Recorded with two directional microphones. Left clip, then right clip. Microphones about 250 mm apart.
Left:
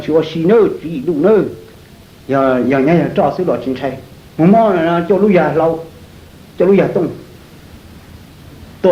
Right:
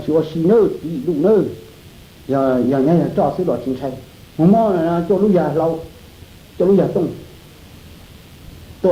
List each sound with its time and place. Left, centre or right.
0.0 s speech: right
8.8 s speech: right